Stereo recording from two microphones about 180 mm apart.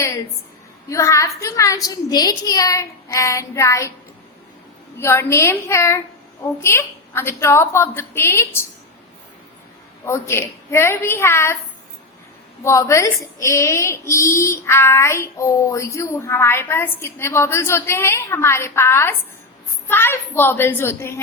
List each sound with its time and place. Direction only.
0.9 s speech: 15° left (ahead or behind)
4.9 s speech: 15° left (ahead or behind)
10.1 s speech: 15° left (ahead or behind)
12.6 s speech: 15° left (ahead or behind)